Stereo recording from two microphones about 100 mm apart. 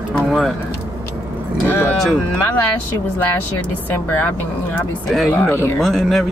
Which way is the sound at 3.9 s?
15° left (ahead or behind).